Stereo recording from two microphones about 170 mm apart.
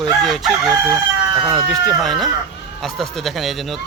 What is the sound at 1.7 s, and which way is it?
Speech, centre (ahead or behind).